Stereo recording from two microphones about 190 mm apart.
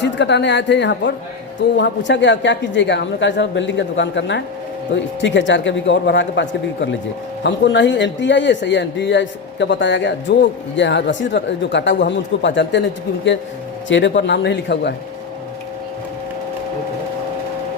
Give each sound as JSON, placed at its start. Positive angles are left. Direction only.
{"t": 0.0, "sound": "a man's voice", "side_deg": 70}
{"t": 13.8, "sound": "a man's voice", "side_deg": 70}